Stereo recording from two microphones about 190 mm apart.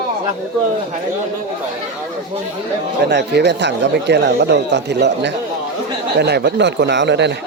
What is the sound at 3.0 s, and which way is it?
Speech, 60° right (ahead or behind).